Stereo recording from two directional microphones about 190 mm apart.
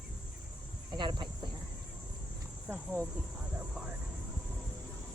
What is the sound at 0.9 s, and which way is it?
Cricket, 25° right (ahead or behind).